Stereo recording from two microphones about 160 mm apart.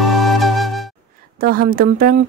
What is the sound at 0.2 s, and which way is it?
Music, centre (ahead or behind).